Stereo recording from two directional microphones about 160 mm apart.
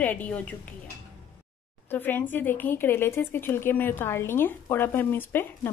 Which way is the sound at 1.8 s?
10° left (ahead or behind).